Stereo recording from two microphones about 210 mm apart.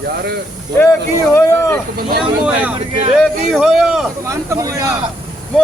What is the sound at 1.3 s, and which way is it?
Speech, 15° left (ahead or behind).